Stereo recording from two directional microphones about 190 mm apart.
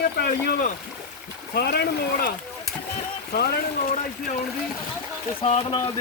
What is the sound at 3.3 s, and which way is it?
Speech, 50° left (ahead or behind).